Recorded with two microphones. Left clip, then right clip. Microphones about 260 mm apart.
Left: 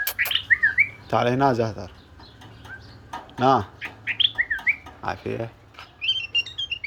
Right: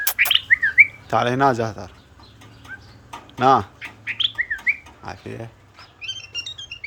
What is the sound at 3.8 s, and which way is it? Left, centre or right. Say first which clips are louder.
Bird: left 1 dB; centre.